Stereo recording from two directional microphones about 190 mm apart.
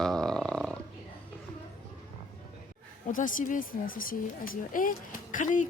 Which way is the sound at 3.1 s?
45° left (ahead or behind).